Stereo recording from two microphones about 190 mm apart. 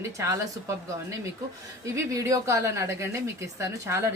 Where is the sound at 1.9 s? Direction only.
15° right (ahead or behind).